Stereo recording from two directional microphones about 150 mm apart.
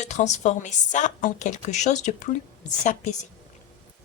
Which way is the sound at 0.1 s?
50° left (ahead or behind).